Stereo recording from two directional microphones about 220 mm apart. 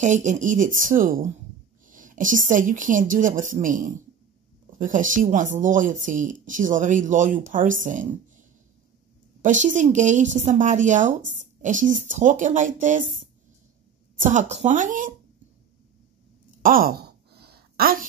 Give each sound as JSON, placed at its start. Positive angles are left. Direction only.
{"t": 0.0, "sound": "speech", "side_deg": -35}
{"t": 14.2, "sound": "speech", "side_deg": -30}
{"t": 16.6, "sound": "sigh", "side_deg": -40}